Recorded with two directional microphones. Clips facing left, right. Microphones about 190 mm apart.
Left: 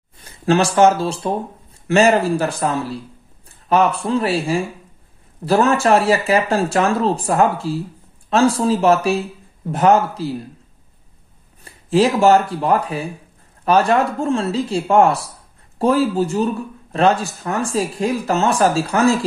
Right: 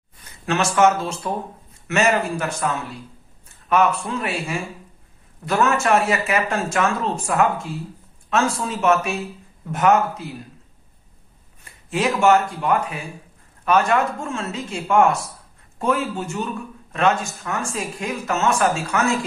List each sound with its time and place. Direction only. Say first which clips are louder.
0.2 s speech: left 6 dB; 35° left (ahead or behind)
11.6 s speech: left 7 dB; 35° left (ahead or behind)